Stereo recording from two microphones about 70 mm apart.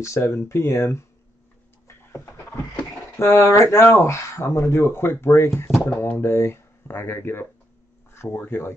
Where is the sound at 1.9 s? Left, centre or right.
Left.